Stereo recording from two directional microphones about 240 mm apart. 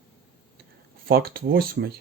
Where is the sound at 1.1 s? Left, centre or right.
Right.